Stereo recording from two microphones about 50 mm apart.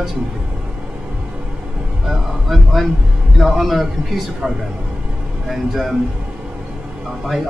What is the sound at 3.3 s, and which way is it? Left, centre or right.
Speech, centre.